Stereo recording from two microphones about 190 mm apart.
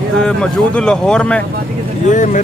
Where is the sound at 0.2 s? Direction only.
5° left (ahead or behind).